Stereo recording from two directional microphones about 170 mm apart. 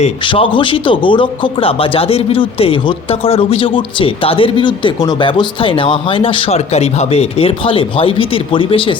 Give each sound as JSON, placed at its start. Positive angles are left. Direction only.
{"t": 0.3, "sound": "a man's voice", "side_deg": 30}